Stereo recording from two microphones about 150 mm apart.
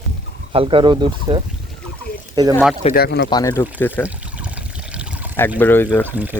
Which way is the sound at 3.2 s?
30° left (ahead or behind).